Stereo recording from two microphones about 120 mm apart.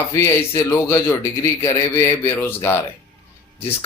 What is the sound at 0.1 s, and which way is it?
A man's voice, 25° left (ahead or behind).